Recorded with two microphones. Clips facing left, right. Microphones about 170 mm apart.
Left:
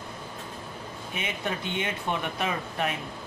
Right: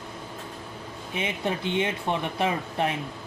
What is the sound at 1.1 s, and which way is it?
Speech, 30° right (ahead or behind).